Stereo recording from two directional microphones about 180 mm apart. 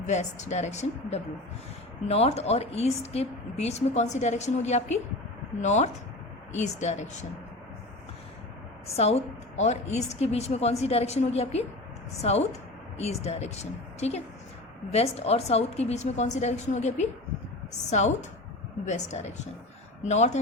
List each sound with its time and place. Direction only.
0.1 s a woman's voice: 40° left (ahead or behind)
9.0 s a woman's voice: 35° left (ahead or behind)